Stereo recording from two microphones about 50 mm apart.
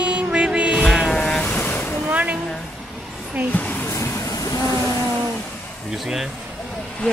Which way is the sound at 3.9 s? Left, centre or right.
Left.